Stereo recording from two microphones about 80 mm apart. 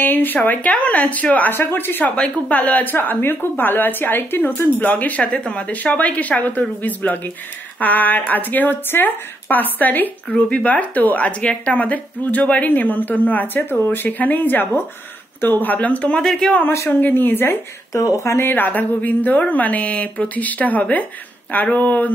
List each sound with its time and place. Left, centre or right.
0.0 s a woman's voice: left; by 16.5 s centre
16.7 s speech: left
17.0 s a woman's voice: left
17.9 s speech: left
18.5 s a woman's voice: left